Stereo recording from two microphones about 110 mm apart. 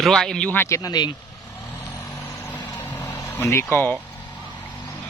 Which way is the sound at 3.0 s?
25° left (ahead or behind).